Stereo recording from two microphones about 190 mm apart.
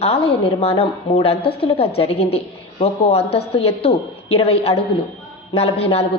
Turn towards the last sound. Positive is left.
turn(degrees=30)  # may be behind; listen again after turning